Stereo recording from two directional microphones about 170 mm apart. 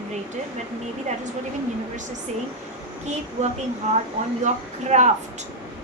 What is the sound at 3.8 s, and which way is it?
A woman's voice, 45° right (ahead or behind).